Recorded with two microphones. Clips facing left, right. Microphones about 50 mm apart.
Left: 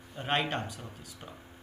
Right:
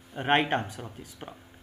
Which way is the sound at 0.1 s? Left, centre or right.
Right.